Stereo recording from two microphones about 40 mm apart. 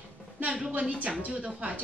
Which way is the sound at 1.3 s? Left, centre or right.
Right.